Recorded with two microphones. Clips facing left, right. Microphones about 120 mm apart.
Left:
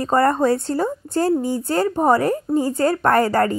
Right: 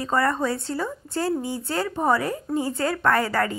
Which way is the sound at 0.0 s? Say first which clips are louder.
Left 6 dB; 45° left (ahead or behind).